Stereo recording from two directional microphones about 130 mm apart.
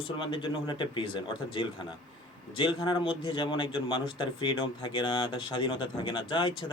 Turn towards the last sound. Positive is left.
turn(degrees=40)  # may be behind; listen again after turning